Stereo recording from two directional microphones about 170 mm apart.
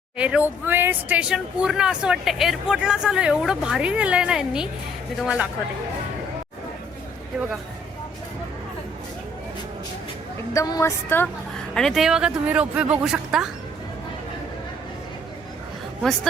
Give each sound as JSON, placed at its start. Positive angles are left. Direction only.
{"t": 0.2, "sound": "speech", "side_deg": -5}
{"t": 10.5, "sound": "a woman's voice", "side_deg": 20}
{"t": 11.7, "sound": "speech", "side_deg": 5}